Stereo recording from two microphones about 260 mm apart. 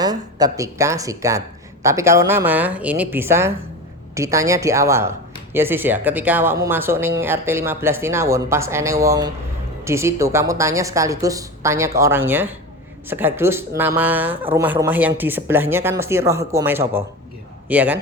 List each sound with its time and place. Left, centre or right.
0.0 s a woman's voice: centre